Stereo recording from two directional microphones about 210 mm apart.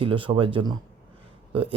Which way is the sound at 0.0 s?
25° right (ahead or behind).